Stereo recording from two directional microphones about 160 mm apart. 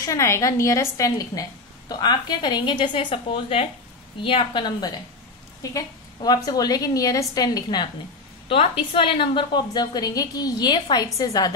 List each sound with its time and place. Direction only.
0.0 s a woman's voice: 20° left (ahead or behind)